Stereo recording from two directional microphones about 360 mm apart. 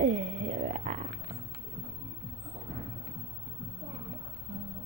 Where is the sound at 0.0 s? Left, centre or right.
Centre.